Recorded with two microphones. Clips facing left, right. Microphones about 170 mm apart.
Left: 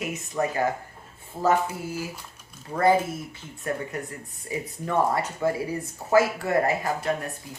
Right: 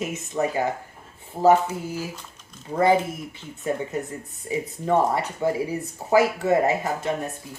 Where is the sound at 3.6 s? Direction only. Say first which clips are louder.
Right 4 dB; 20° right (ahead or behind).